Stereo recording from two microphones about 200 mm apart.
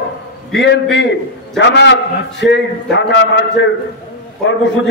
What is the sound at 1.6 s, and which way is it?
A man's voice, 60° left (ahead or behind).